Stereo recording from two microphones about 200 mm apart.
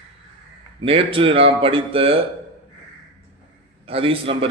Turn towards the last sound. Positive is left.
turn(degrees=-25)  # may be behind; listen again after turning